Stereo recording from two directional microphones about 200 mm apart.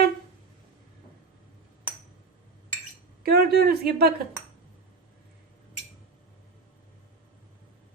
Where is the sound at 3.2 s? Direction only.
50° right (ahead or behind).